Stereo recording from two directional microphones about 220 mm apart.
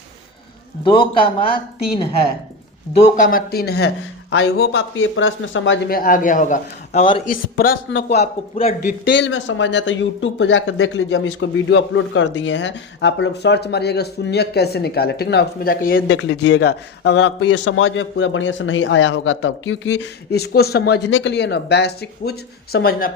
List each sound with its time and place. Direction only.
0.9 s a man's voice: 20° left (ahead or behind)
3.0 s a man's voice: 40° left (ahead or behind); by 5.8 s 60° left (ahead or behind)
5.9 s a man's voice: 40° left (ahead or behind)
7.3 s a man's voice: 40° left (ahead or behind)
16.1 s speech: 55° left (ahead or behind)